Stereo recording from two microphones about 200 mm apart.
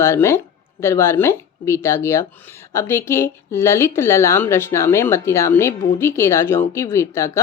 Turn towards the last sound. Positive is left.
turn(degrees=15)  # may be behind; listen again after turning